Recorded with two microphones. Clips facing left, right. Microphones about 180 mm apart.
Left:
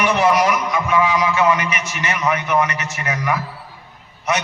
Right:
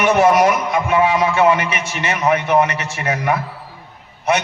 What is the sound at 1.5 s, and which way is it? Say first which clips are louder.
A man's voice: right 2 dB; 30° right (ahead or behind).